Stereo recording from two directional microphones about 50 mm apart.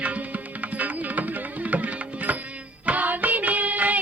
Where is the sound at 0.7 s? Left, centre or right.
Right.